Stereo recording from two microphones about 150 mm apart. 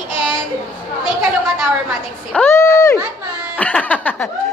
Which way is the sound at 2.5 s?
20° left (ahead or behind).